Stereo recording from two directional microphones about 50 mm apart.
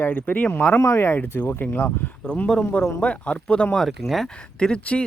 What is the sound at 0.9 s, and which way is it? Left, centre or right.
Speech, left.